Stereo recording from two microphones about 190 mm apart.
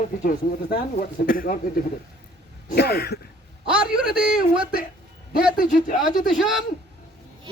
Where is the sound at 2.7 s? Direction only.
55° left (ahead or behind).